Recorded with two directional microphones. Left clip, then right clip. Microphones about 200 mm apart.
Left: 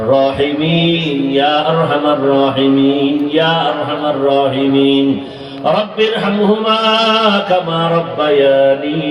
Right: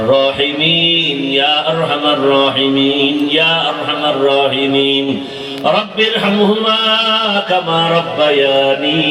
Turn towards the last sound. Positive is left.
turn(degrees=-35)  # may be behind; listen again after turning